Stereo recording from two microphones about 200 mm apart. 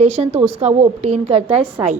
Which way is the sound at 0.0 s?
35° right (ahead or behind).